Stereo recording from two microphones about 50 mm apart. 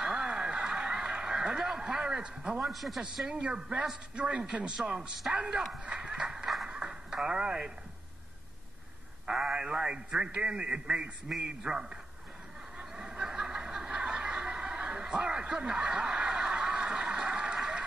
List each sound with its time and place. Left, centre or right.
0.0 s a sound: centre
2.6 s a man's voice: centre
3.3 s a man's voice: centre
5.9 s a sound: centre
6.7 s radio: centre
9.2 s a man's voice: centre
11.2 s a man's voice: centre
12.7 s snicker: centre